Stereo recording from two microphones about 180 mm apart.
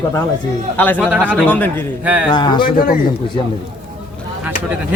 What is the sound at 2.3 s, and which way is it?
Speech, 25° left (ahead or behind).